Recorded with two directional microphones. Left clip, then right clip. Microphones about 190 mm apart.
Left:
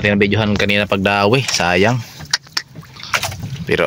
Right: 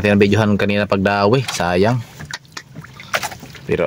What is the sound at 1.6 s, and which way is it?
Vehicle, centre (ahead or behind).